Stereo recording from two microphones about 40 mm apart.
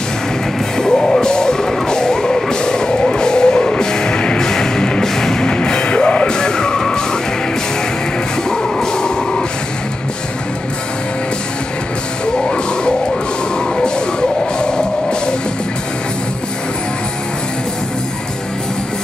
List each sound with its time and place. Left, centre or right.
0.7 s music: centre
8.5 s music: centre
13.7 s music: left